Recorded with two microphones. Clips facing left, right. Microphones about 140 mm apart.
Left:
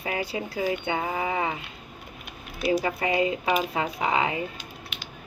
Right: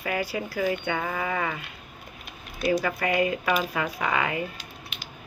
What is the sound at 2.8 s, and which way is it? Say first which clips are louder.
Speech: even; 25° left (ahead or behind).